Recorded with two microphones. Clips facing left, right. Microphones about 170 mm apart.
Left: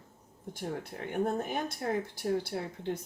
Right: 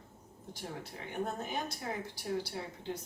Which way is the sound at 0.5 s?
55° left (ahead or behind).